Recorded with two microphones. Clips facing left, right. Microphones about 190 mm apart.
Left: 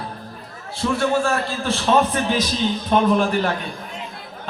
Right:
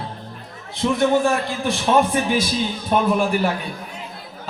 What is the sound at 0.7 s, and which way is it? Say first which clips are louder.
A man's voice: right 2 dB; 20° right (ahead or behind).